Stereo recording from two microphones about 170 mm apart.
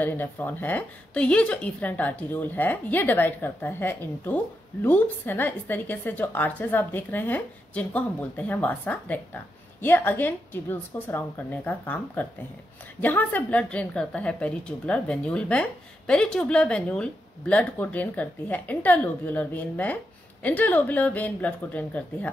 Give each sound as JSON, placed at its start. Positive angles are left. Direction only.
{"t": 0.0, "sound": "a woman's voice", "side_deg": 10}